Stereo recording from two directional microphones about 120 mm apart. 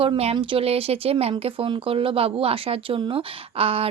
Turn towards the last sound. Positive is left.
turn(degrees=-55)  # may be behind; listen again after turning